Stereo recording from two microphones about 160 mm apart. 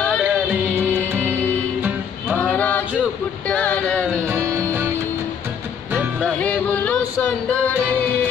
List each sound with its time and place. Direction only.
0.2 s music: 10° right (ahead or behind)
2.2 s a sound: 10° left (ahead or behind)
4.3 s music: 15° right (ahead or behind)
6.2 s music: 10° left (ahead or behind)